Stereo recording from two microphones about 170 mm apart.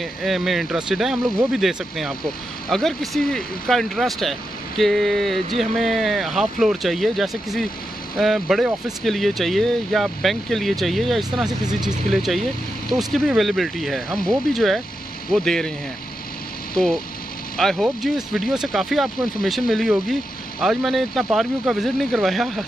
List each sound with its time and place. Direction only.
0.0 s speech: centre (ahead or behind)
11.6 s speech: 25° right (ahead or behind)
12.1 s speech: centre (ahead or behind)
16.7 s speech: 5° left (ahead or behind)